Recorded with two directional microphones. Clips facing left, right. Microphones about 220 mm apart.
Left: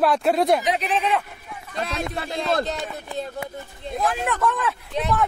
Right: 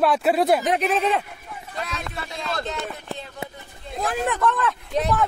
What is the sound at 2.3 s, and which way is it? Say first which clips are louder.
Speech: left 6 dB; 35° left (ahead or behind).